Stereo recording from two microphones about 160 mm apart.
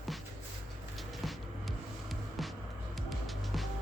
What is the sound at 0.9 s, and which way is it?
Music, centre (ahead or behind).